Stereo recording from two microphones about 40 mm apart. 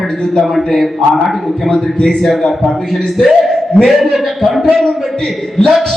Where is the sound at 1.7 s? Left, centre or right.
Centre.